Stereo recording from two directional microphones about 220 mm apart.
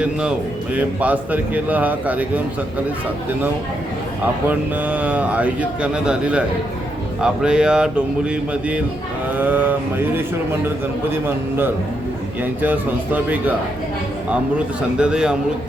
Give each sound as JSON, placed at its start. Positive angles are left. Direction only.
{"t": 0.0, "sound": "a man's voice", "side_deg": -5}
{"t": 4.4, "sound": "a man's voice", "side_deg": -5}